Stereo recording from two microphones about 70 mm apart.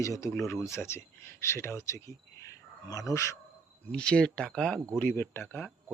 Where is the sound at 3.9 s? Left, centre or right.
Centre.